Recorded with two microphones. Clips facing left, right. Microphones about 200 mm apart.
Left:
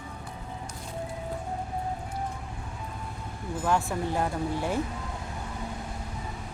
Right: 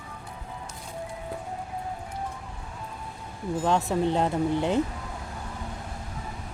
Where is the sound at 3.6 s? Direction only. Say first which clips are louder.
Right 3 dB; 20° right (ahead or behind).